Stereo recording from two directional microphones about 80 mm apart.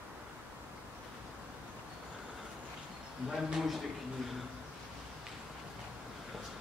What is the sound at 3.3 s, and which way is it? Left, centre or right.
Speech, centre.